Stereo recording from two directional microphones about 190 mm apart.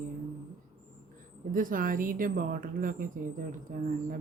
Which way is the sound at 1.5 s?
45° right (ahead or behind).